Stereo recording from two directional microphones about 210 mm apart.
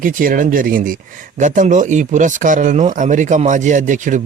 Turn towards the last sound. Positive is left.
turn(degrees=-35)  # may be behind; listen again after turning